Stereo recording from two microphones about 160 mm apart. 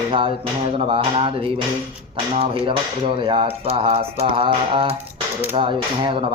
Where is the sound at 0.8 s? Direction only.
35° right (ahead or behind).